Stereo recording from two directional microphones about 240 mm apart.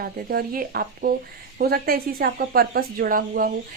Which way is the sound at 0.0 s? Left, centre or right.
Right.